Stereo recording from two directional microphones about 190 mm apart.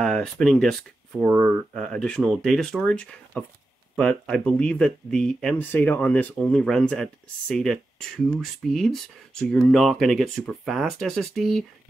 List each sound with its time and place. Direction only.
0.0 s speech: 5° left (ahead or behind)